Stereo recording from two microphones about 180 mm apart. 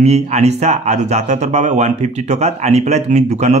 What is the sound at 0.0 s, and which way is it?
Speech, 35° right (ahead or behind).